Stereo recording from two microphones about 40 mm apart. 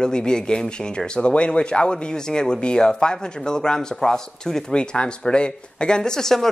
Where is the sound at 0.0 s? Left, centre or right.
Centre.